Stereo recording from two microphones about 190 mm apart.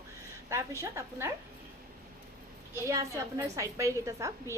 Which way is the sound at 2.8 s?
15° right (ahead or behind).